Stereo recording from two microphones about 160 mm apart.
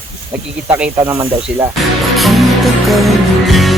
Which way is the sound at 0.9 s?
20° right (ahead or behind).